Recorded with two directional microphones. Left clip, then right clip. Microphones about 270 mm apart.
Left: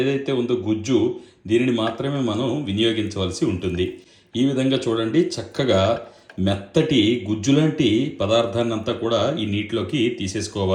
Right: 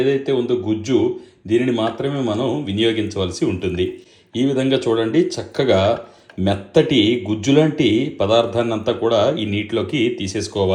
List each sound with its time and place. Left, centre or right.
0.3 s a man's voice: centre